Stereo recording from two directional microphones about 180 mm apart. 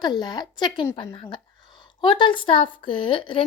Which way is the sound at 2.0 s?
25° left (ahead or behind).